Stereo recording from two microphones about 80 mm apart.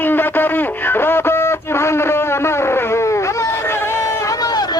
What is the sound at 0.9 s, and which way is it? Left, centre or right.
Music, left.